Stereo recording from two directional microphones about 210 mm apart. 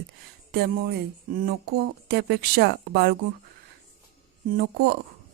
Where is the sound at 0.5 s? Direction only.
50° right (ahead or behind).